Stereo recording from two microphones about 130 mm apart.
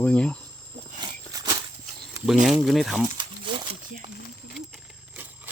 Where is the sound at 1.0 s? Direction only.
30° right (ahead or behind).